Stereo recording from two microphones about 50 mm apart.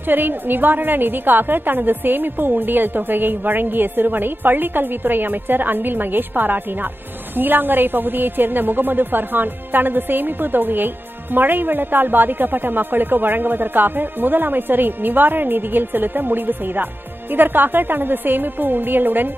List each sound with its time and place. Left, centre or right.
0.1 s a woman's voice: right